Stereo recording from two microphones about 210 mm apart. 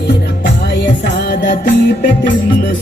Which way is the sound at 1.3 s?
45° left (ahead or behind).